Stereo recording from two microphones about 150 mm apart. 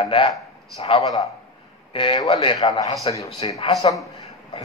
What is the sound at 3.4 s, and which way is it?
Speech, 40° left (ahead or behind).